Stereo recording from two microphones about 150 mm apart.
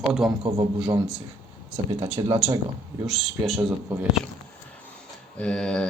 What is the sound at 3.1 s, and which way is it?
Speech, centre (ahead or behind).